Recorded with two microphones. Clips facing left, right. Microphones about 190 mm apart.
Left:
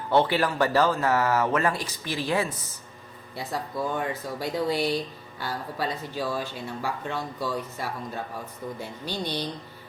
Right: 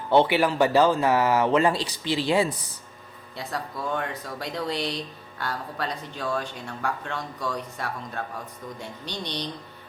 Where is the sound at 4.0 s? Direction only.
Centre (ahead or behind).